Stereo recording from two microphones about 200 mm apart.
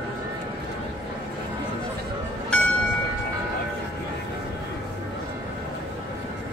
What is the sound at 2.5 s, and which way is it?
Music, 5° left (ahead or behind).